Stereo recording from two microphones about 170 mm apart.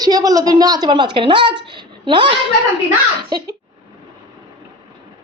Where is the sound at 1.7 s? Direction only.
30° right (ahead or behind).